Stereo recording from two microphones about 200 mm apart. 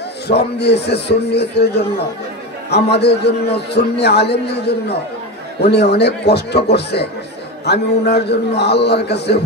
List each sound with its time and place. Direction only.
0.3 s a man's voice: 55° left (ahead or behind)
2.7 s a man's voice: 55° left (ahead or behind)